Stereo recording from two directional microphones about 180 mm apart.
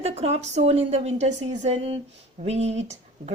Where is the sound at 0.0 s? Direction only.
35° right (ahead or behind).